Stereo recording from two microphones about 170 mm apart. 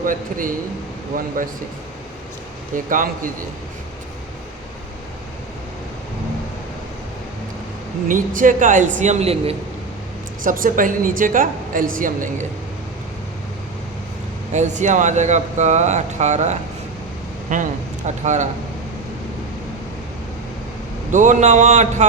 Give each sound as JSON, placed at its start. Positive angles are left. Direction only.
{"t": 0.0, "sound": "a woman's voice", "side_deg": -55}
{"t": 2.7, "sound": "a woman's voice", "side_deg": -55}
{"t": 8.0, "sound": "a woman's voice", "side_deg": -50}
{"t": 10.4, "sound": "a woman's voice", "side_deg": -55}
{"t": 14.5, "sound": "a woman's voice", "side_deg": -45}
{"t": 21.1, "sound": "a woman's voice", "side_deg": -45}